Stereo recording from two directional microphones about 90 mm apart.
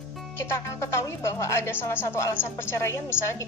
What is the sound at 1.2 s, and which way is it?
A woman's voice, 30° left (ahead or behind).